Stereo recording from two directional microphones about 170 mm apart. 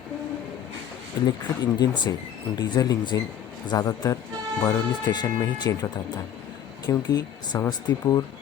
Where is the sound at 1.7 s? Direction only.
25° left (ahead or behind).